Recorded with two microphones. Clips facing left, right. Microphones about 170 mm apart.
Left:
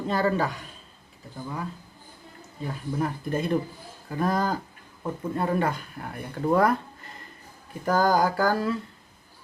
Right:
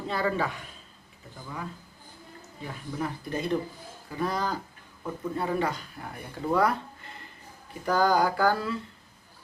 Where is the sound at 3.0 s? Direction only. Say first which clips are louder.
Left 3 dB; 50° left (ahead or behind).